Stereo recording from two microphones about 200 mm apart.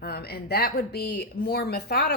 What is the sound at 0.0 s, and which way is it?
Speech, 50° left (ahead or behind).